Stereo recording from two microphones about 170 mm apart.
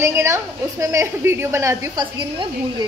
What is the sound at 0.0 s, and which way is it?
A woman's voice, 15° right (ahead or behind).